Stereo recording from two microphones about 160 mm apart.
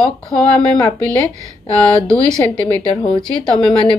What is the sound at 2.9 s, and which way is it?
Speech, 30° left (ahead or behind).